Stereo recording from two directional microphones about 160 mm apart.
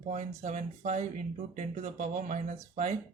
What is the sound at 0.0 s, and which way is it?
Speech, 45° right (ahead or behind).